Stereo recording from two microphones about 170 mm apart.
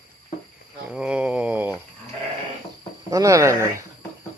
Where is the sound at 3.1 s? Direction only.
20° right (ahead or behind).